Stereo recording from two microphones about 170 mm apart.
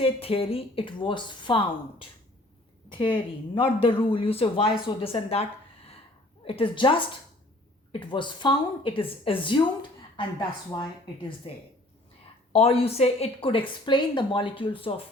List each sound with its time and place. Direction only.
0.0 s a woman's voice: 35° left (ahead or behind)
10.7 s a woman's voice: 25° left (ahead or behind)
12.5 s a woman's voice: 35° left (ahead or behind)